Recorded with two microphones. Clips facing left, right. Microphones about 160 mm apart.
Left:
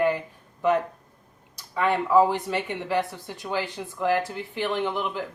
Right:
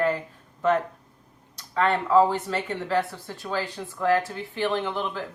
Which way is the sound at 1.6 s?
10° left (ahead or behind).